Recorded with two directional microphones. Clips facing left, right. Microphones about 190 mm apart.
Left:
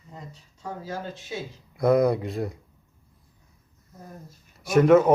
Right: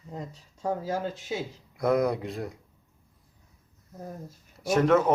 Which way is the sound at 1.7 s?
5° left (ahead or behind).